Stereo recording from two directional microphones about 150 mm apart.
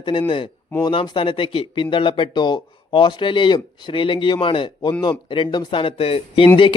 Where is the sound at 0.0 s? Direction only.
35° left (ahead or behind).